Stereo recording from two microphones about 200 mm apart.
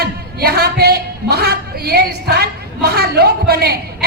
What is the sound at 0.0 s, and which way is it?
A woman's voice, 50° right (ahead or behind).